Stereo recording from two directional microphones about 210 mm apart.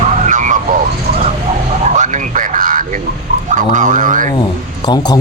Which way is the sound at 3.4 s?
35° right (ahead or behind).